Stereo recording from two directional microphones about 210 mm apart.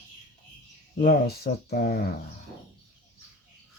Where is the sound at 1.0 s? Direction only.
50° left (ahead or behind).